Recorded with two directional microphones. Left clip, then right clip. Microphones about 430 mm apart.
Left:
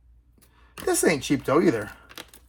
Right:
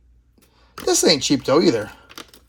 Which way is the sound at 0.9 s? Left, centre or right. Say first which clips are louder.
Right 6 dB; centre.